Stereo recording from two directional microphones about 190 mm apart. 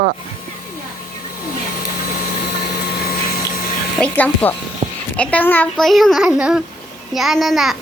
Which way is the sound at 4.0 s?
10° left (ahead or behind).